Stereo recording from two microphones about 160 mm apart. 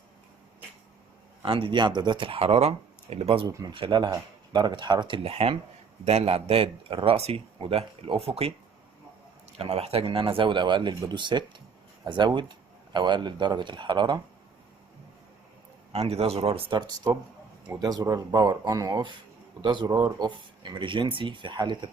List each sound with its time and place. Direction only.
1.4 s speech: 30° right (ahead or behind)
3.5 s speech: 25° right (ahead or behind)
15.9 s speech: 40° right (ahead or behind)